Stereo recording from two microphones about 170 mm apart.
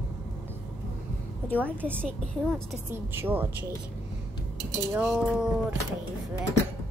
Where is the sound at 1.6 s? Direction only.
10° right (ahead or behind).